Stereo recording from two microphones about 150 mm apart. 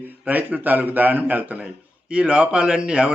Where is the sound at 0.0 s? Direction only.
10° right (ahead or behind).